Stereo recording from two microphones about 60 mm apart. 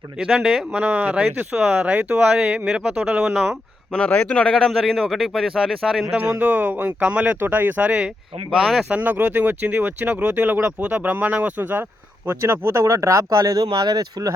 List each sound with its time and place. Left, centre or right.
0.2 s speech: centre
0.7 s speech: right
4.3 s speech: centre
4.5 s a man's voice: centre
6.4 s speech: right
7.3 s speech: right
7.9 s speech: centre
8.6 s a man's voice: centre
8.9 s speech: right